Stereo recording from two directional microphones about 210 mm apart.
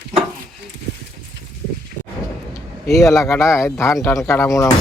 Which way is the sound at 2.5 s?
15° left (ahead or behind).